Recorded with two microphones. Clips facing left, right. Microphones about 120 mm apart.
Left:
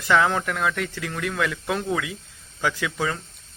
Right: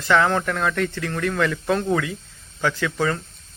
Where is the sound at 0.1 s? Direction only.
5° left (ahead or behind).